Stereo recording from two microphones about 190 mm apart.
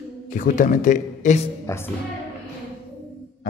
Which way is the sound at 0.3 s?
45° left (ahead or behind).